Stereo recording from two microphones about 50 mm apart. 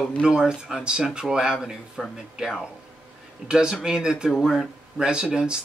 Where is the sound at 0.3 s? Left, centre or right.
Centre.